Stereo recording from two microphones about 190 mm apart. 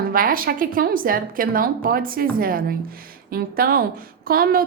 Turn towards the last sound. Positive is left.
turn(degrees=-50)  # may be behind; listen again after turning